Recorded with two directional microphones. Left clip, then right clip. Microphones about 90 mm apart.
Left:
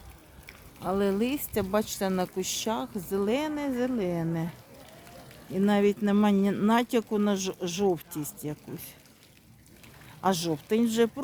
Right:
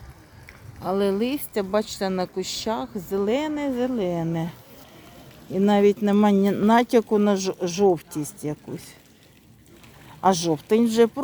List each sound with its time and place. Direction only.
0.8 s speech: 5° right (ahead or behind)
5.5 s speech: 15° right (ahead or behind)
10.2 s speech: 20° right (ahead or behind)